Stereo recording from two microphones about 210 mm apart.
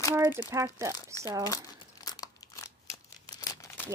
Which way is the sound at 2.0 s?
15° left (ahead or behind).